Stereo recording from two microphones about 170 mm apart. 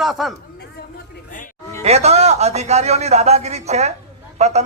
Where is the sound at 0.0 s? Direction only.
Centre (ahead or behind).